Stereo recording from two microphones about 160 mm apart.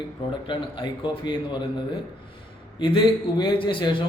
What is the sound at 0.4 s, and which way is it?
A man's voice, 30° left (ahead or behind).